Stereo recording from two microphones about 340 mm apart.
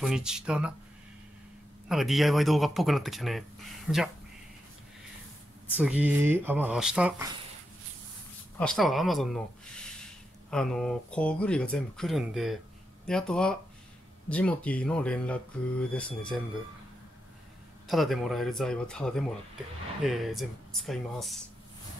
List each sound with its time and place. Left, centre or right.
0.0 s speech: centre
1.9 s speech: centre
5.8 s speech: centre
8.5 s speech: centre
17.8 s speech: centre